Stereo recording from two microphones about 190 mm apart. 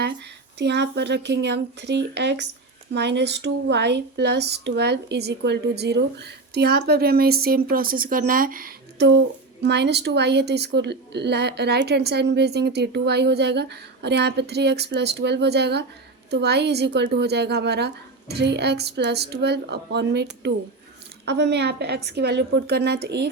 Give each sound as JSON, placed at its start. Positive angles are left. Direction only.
{"t": 0.6, "sound": "speech", "side_deg": -65}